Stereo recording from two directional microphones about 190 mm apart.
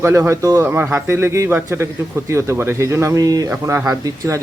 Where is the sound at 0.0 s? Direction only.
15° right (ahead or behind).